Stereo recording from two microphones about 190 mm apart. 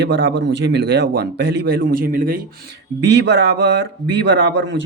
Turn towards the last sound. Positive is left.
turn(degrees=-70)  # may be behind; listen again after turning